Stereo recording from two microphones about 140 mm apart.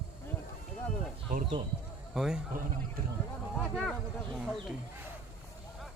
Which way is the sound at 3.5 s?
Centre (ahead or behind).